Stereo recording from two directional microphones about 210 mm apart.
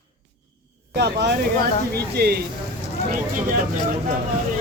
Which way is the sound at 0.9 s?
50° right (ahead or behind).